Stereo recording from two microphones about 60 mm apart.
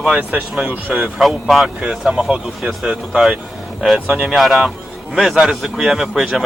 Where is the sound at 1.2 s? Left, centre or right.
Centre.